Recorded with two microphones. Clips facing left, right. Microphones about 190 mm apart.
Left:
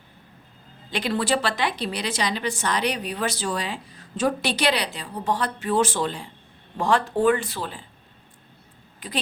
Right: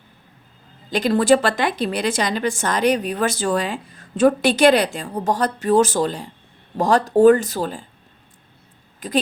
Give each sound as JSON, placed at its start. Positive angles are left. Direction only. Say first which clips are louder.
{"t": 0.9, "sound": "a woman's voice", "louder": "right 8 dB", "side_deg": -45}
{"t": 9.0, "sound": "a woman's voice", "louder": "right 9 dB", "side_deg": -45}